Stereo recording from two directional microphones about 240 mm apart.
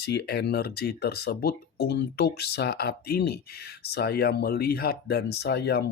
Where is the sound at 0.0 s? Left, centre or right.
Left.